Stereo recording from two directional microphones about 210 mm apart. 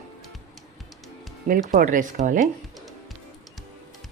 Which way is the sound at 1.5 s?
40° right (ahead or behind).